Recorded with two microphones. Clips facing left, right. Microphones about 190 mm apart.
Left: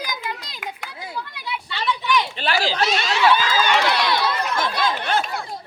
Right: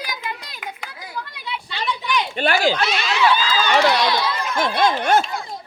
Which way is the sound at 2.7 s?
40° left (ahead or behind).